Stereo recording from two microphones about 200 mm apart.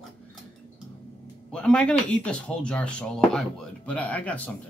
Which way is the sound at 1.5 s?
5° left (ahead or behind).